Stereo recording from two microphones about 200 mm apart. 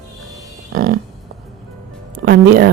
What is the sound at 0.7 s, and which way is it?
Speech, 50° right (ahead or behind).